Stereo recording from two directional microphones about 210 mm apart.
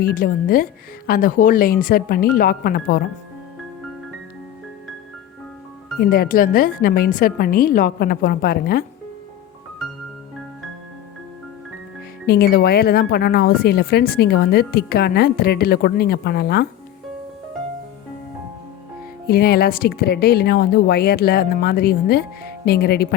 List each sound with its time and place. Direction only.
0.0 s a woman's voice: 40° left (ahead or behind)
6.0 s a woman's voice: 45° left (ahead or behind)
12.2 s a woman's voice: 50° left (ahead or behind)
19.3 s a woman's voice: 50° left (ahead or behind)